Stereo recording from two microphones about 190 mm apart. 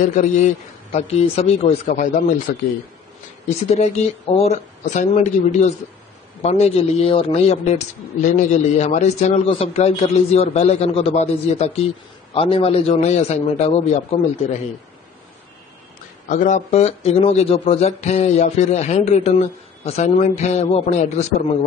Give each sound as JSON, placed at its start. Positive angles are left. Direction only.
{"t": 0.0, "sound": "speech", "side_deg": 40}
{"t": 2.5, "sound": "speech", "side_deg": 55}
{"t": 3.4, "sound": "speech", "side_deg": 35}
{"t": 16.3, "sound": "speech", "side_deg": 40}